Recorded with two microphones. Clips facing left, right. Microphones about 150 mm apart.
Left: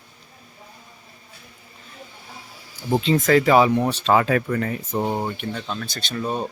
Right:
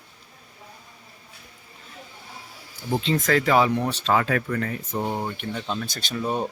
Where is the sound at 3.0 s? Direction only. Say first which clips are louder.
Left 5 dB; 10° left (ahead or behind).